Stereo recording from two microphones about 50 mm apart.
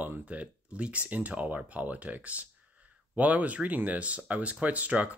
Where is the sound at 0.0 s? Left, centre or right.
Right.